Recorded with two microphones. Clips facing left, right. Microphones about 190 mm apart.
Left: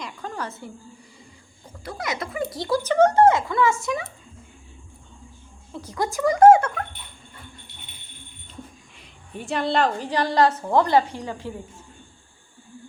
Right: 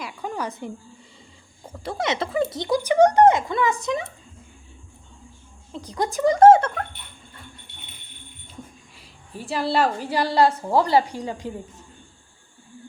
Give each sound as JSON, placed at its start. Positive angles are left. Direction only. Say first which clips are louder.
{"t": 0.0, "sound": "a sound", "louder": "right 3 dB", "side_deg": -10}
{"t": 1.8, "sound": "speech", "louder": "right 4 dB", "side_deg": -25}
{"t": 5.7, "sound": "speech", "louder": "right 1 dB", "side_deg": -20}
{"t": 9.0, "sound": "a woman's voice", "louder": "left 1 dB", "side_deg": -5}